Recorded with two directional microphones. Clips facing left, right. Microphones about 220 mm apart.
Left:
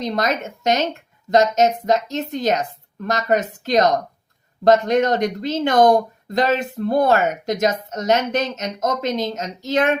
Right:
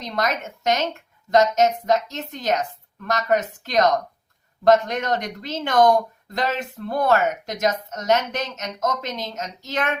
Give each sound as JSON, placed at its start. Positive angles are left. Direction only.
{"t": 0.1, "sound": "a woman's voice", "side_deg": 30}